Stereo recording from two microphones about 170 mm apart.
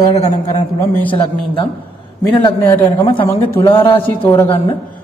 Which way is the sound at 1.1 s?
30° left (ahead or behind).